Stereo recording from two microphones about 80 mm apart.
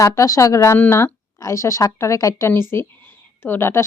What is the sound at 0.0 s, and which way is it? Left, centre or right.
A woman's voice, left.